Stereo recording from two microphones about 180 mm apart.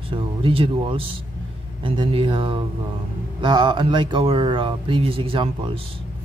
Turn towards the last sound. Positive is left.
turn(degrees=-30)  # may be behind; listen again after turning